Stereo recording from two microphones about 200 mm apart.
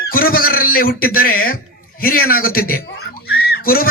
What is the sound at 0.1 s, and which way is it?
A man's voice, 45° left (ahead or behind).